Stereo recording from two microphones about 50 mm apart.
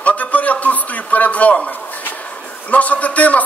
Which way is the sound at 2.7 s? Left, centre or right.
Left.